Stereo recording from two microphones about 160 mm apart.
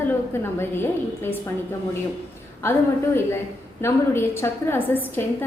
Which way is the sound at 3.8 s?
15° left (ahead or behind).